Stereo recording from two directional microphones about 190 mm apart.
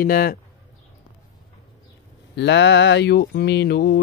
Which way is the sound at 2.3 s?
70° left (ahead or behind).